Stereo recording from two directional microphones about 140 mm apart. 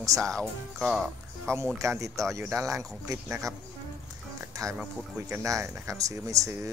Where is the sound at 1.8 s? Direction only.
20° right (ahead or behind).